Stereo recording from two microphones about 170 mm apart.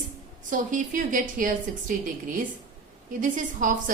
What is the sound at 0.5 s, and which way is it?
A woman's voice, 50° right (ahead or behind).